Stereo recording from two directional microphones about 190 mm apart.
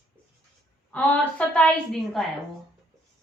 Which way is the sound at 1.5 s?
5° left (ahead or behind).